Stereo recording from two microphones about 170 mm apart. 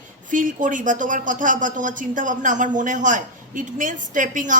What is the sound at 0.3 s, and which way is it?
A woman's voice, 50° right (ahead or behind).